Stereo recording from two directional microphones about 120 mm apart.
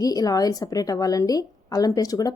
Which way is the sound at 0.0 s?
30° left (ahead or behind).